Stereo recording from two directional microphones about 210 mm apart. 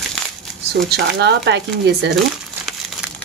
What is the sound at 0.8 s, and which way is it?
Speech, 50° right (ahead or behind).